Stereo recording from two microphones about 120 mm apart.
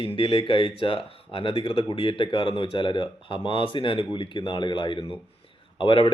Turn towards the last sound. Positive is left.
turn(degrees=50)  # may be behind; listen again after turning